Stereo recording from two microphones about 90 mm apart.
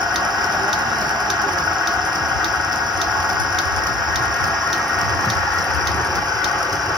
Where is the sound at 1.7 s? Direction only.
5° right (ahead or behind).